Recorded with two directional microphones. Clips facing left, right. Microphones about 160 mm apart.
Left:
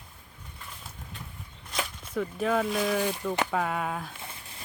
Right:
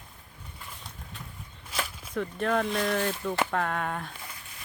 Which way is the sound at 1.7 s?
Centre (ahead or behind).